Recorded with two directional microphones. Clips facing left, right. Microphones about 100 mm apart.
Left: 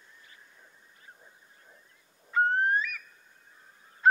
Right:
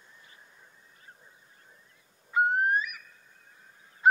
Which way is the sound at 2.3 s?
15° right (ahead or behind).